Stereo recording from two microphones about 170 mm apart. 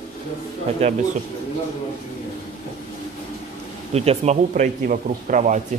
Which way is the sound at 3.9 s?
40° right (ahead or behind).